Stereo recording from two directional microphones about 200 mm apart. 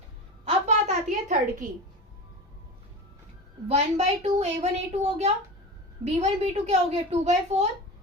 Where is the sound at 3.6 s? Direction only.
35° right (ahead or behind).